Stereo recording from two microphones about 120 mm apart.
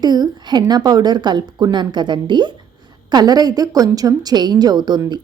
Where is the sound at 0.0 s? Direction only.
35° right (ahead or behind).